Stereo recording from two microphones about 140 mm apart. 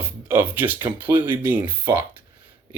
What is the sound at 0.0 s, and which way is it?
A man's voice, 15° right (ahead or behind).